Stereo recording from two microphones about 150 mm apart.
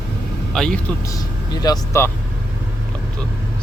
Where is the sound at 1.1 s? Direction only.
25° left (ahead or behind).